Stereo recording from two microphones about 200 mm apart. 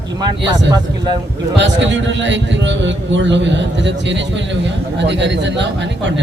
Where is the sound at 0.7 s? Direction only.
20° right (ahead or behind).